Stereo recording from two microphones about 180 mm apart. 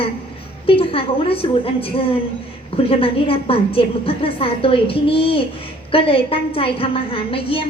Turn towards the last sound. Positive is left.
turn(degrees=30)  # may be behind; listen again after turning